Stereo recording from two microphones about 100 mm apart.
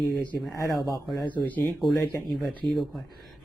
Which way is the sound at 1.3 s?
15° left (ahead or behind).